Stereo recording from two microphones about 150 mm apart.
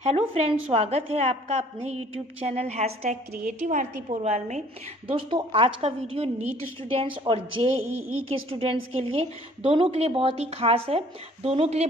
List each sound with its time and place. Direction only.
0.0 s a woman's voice: 45° right (ahead or behind)
5.0 s a woman's voice: 35° right (ahead or behind)
7.8 s speech: 10° right (ahead or behind)
8.3 s a woman's voice: 40° right (ahead or behind)